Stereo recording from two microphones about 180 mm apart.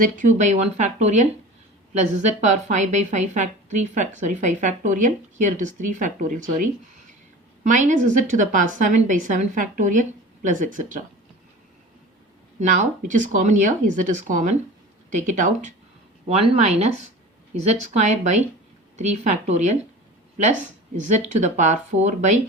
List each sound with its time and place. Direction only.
0.0 s a woman's voice: 45° right (ahead or behind)
12.5 s a woman's voice: 40° right (ahead or behind)